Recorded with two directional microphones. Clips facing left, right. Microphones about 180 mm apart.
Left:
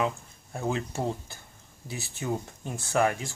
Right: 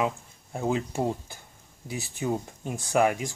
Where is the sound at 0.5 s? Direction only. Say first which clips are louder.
Right 3 dB; 15° right (ahead or behind).